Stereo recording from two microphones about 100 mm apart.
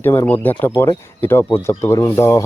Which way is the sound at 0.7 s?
30° left (ahead or behind).